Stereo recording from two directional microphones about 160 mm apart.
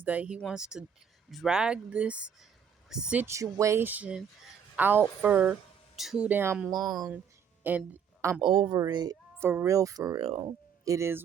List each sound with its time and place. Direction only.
0.0 s speech: 10° right (ahead or behind)
3.2 s speech: 20° right (ahead or behind)
6.8 s speech: centre (ahead or behind)
7.6 s speech: 10° right (ahead or behind)
8.4 s speech: 30° right (ahead or behind)
9.4 s speech: 15° right (ahead or behind)
10.2 s speech: 35° right (ahead or behind)
10.8 s speech: 15° right (ahead or behind)